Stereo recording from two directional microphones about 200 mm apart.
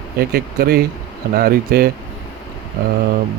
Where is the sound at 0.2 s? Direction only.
50° right (ahead or behind).